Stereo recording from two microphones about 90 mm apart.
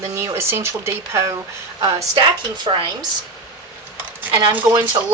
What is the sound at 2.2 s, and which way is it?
Speech, 60° right (ahead or behind).